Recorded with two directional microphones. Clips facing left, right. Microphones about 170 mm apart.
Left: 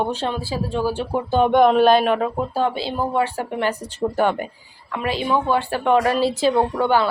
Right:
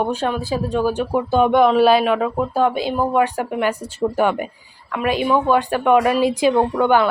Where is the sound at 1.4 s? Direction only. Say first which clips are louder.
Even; 5° right (ahead or behind).